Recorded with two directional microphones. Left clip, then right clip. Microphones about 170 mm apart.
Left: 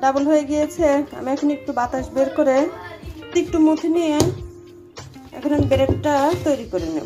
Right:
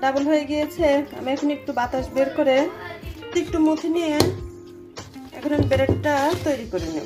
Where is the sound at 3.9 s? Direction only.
15° left (ahead or behind).